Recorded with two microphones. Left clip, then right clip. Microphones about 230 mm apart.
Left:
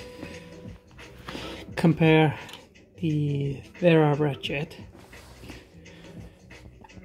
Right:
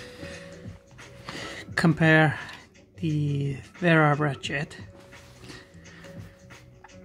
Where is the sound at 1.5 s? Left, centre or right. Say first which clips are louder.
Even; centre.